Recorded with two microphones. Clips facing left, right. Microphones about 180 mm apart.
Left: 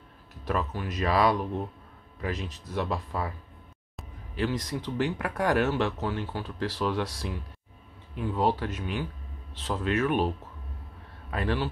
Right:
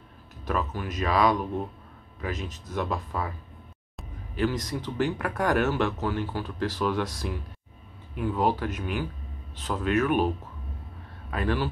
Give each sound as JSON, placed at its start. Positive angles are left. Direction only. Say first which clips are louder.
{"t": 0.5, "sound": "speech", "louder": "right 1 dB", "side_deg": 30}
{"t": 4.4, "sound": "speech", "louder": "right 2 dB", "side_deg": 30}
{"t": 11.2, "sound": "speech", "louder": "right 2 dB", "side_deg": 30}